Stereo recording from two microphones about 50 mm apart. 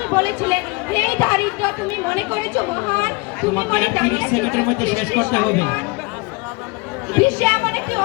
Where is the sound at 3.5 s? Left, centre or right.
Left.